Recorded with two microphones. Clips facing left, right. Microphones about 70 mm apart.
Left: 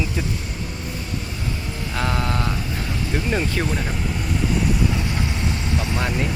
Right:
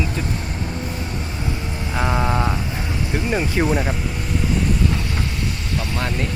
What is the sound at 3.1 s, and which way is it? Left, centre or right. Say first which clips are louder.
Speech: right 2 dB; centre.